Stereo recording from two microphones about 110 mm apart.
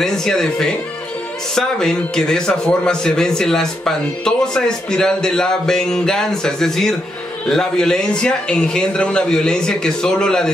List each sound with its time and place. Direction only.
0.0 s a man's voice: 5° left (ahead or behind)